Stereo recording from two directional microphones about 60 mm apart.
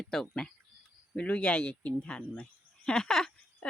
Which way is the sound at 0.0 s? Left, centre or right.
Centre.